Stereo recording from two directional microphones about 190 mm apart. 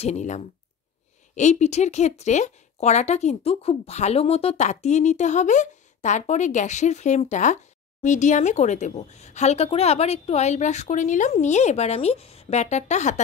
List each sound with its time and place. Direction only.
0.0 s speech: 35° left (ahead or behind)